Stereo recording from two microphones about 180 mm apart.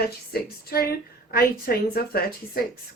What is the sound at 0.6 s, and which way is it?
A woman's voice, 55° left (ahead or behind).